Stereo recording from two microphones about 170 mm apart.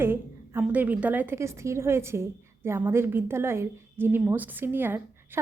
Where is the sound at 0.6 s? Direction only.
10° right (ahead or behind).